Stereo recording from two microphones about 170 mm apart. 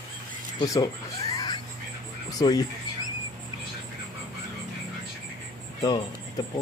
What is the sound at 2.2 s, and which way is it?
Music, 20° left (ahead or behind).